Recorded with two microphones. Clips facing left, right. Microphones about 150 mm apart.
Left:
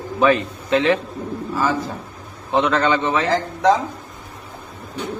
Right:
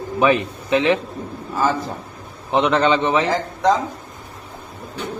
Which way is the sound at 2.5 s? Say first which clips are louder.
Right 1 dB; 20° right (ahead or behind).